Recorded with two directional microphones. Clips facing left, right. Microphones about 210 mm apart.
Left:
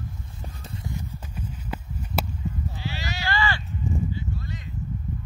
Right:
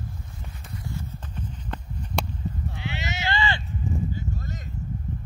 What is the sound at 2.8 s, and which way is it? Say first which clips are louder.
Clip-clop: right 3 dB; 20° right (ahead or behind).